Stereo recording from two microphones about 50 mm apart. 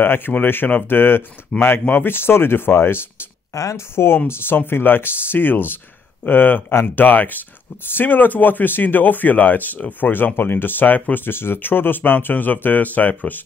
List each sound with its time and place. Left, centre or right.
0.0 s speech: left
1.5 s speech: centre
1.9 s speech: left
3.5 s speech: left
3.9 s speech: left